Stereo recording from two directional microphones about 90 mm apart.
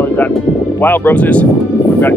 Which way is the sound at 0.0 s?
20° left (ahead or behind).